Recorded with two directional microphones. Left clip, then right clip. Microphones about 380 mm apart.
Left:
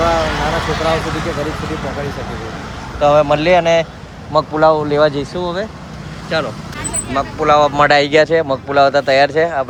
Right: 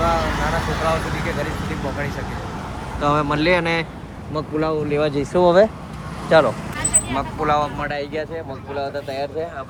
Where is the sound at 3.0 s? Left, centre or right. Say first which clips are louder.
Left 8 dB; centre.